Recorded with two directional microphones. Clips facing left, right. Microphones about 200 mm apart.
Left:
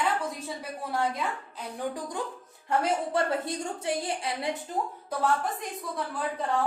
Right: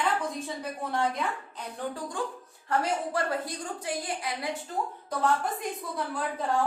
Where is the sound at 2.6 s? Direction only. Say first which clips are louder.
Left 1 dB; 25° left (ahead or behind).